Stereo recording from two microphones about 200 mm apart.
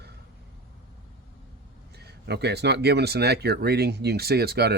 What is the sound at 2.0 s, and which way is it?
Speech, 55° right (ahead or behind).